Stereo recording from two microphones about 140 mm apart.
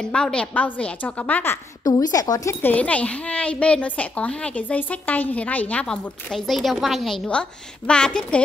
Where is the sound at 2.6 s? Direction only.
10° left (ahead or behind).